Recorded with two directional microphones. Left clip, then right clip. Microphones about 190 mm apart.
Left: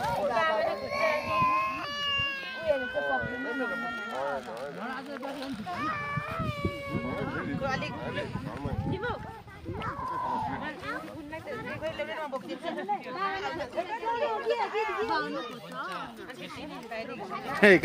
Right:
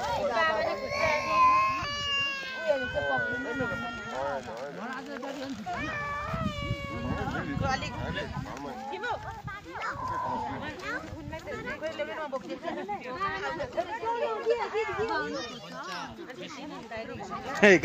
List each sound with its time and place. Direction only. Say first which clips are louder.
0.2 s baby cry: even; 10° right (ahead or behind); by 4.4 s 20° left (ahead or behind)
5.8 s a sound: left 2 dB; 5° left (ahead or behind)
7.1 s speech: right 2 dB; centre (ahead or behind)
8.9 s speech: right 1 dB; 15° right (ahead or behind)
10.1 s a sound: left 2 dB; 15° left (ahead or behind)
11.8 s speech: left 1 dB; 60° left (ahead or behind)
17.6 s speech: even; centre (ahead or behind)